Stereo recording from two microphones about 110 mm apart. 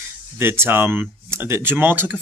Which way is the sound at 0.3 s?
20° right (ahead or behind).